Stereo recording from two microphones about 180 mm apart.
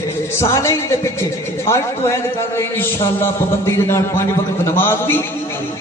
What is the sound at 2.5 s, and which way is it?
A man's voice, 15° left (ahead or behind).